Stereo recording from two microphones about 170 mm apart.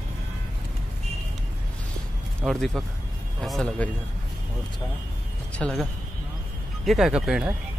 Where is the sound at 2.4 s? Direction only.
Centre (ahead or behind).